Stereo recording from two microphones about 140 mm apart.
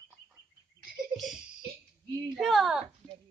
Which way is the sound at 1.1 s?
Centre (ahead or behind).